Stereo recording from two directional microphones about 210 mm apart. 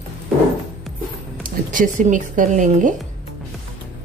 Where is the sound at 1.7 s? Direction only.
40° right (ahead or behind).